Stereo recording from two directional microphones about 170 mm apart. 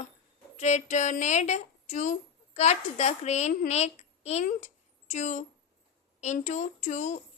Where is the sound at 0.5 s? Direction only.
45° left (ahead or behind).